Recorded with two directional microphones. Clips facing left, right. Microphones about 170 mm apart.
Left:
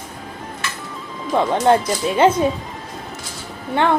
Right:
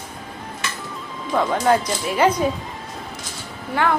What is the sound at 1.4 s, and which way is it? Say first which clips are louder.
Speech: left 3 dB; 25° left (ahead or behind).